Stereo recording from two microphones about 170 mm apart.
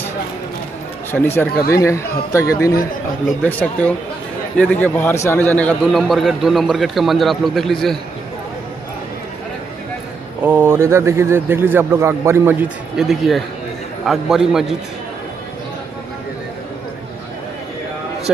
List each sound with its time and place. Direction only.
1.1 s a man's voice: 10° left (ahead or behind)
10.4 s speech: 10° right (ahead or behind)
12.9 s a man's voice: centre (ahead or behind)